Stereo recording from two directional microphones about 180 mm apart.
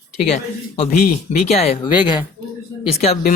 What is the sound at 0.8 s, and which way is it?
Speech, 40° left (ahead or behind).